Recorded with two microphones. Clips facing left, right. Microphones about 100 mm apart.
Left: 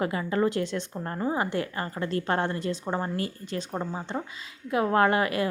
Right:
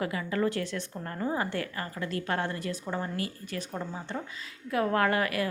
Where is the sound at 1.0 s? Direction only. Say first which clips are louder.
Left 2 dB; 30° left (ahead or behind).